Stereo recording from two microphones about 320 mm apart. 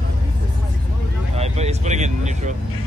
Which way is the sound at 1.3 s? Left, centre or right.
Centre.